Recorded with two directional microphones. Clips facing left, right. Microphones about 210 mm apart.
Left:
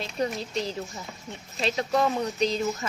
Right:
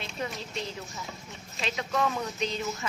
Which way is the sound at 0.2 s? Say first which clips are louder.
Left 7 dB; 35° left (ahead or behind).